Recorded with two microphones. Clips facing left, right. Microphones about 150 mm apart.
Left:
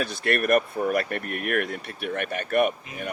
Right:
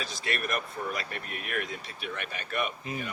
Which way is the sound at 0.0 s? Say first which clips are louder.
Left 9 dB; 60° left (ahead or behind).